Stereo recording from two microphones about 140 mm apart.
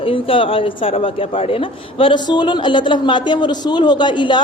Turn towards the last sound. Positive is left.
turn(degrees=35)  # may be behind; listen again after turning